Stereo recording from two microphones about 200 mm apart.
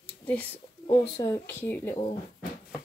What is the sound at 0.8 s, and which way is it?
Speech, 25° left (ahead or behind).